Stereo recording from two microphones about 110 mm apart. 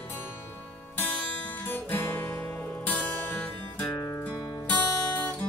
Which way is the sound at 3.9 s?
30° left (ahead or behind).